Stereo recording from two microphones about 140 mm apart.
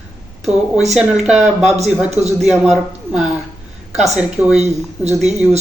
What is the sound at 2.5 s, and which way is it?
Speech, 5° right (ahead or behind).